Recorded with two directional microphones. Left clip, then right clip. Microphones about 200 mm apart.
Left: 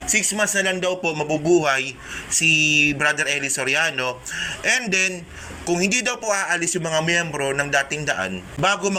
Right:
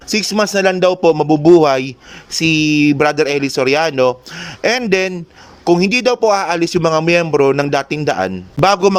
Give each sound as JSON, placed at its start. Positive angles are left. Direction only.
{"t": 0.1, "sound": "speech", "side_deg": -45}